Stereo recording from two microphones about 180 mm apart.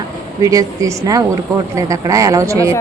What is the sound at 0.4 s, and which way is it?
A woman's voice, 20° right (ahead or behind).